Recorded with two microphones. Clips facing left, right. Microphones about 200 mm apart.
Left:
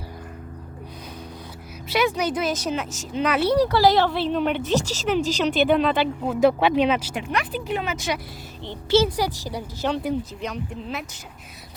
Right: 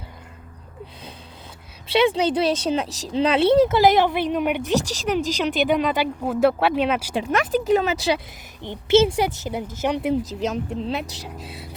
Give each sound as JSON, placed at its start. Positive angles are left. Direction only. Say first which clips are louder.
{"t": 1.9, "sound": "speech", "louder": "right 4 dB", "side_deg": -30}
{"t": 7.1, "sound": "speech", "louder": "right 6 dB", "side_deg": -40}
{"t": 8.6, "sound": "a woman's voice", "louder": "right 3 dB", "side_deg": -20}
{"t": 10.5, "sound": "speech", "louder": "right 5 dB", "side_deg": -30}